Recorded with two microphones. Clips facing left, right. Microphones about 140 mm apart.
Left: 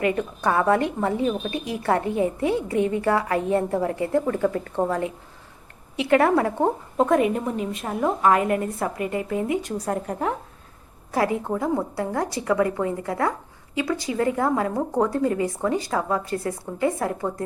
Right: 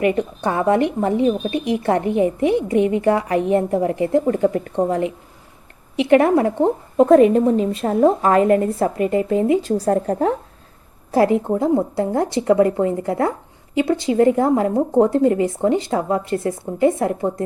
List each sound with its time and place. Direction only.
0.0 s a woman's voice: 20° right (ahead or behind)
4.3 s a woman's voice: 30° right (ahead or behind)
7.1 s a woman's voice: 35° right (ahead or behind)
11.1 s a woman's voice: 25° right (ahead or behind)